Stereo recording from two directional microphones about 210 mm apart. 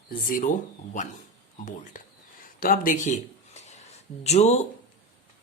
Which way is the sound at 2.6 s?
40° left (ahead or behind).